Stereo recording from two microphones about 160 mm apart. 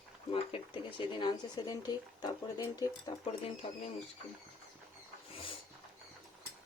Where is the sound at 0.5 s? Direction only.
30° left (ahead or behind).